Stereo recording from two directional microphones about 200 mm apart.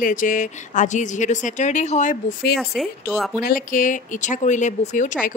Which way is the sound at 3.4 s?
40° left (ahead or behind).